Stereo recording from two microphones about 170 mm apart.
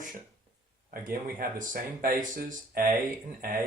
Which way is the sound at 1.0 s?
55° right (ahead or behind).